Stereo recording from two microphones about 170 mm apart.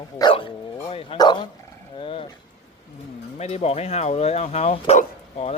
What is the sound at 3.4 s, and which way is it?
Speech, 40° left (ahead or behind).